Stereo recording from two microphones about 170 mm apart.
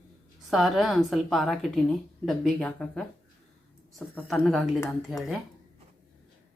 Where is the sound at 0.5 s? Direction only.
Centre (ahead or behind).